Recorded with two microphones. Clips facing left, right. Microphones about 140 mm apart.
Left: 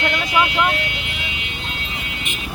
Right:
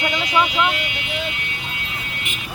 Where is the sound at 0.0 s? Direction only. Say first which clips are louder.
Even; centre (ahead or behind).